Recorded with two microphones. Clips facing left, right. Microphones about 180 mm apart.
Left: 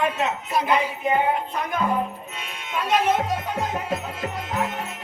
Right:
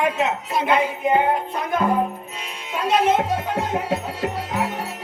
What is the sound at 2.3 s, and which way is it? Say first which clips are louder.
Music: right 1 dB; 35° right (ahead or behind).